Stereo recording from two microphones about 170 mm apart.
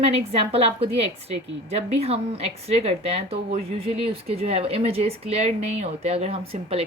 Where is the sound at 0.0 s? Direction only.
35° right (ahead or behind).